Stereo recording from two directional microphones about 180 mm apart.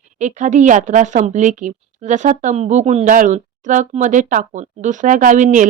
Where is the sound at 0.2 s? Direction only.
40° right (ahead or behind).